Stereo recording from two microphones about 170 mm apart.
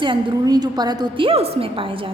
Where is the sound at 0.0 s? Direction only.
25° right (ahead or behind).